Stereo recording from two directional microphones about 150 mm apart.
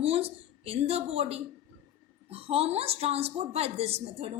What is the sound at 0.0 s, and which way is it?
A woman's voice, 40° right (ahead or behind).